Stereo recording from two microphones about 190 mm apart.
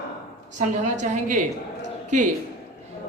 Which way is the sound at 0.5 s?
40° right (ahead or behind).